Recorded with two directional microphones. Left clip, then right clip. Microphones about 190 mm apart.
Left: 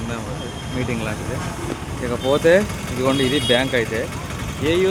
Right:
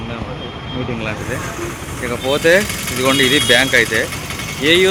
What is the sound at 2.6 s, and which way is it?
Speech, 50° left (ahead or behind).